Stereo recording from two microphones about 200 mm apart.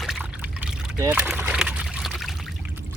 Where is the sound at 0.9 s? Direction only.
15° right (ahead or behind).